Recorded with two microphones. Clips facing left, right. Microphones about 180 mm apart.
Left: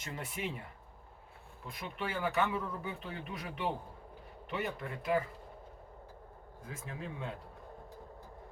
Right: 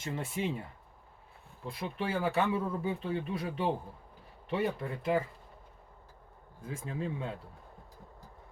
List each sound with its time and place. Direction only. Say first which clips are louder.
0.0 s speech: right 5 dB; 25° right (ahead or behind)
1.6 s speech: right 5 dB; 30° right (ahead or behind)
6.7 s speech: right 7 dB; 30° right (ahead or behind)